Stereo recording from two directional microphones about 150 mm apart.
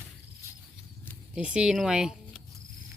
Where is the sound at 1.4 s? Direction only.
5° right (ahead or behind).